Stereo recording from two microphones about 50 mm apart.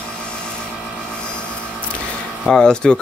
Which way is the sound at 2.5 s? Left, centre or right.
Centre.